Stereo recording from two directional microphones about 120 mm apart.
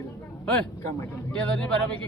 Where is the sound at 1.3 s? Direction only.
10° left (ahead or behind).